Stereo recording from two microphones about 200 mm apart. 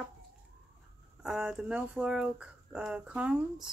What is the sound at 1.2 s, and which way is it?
Speech, 5° right (ahead or behind).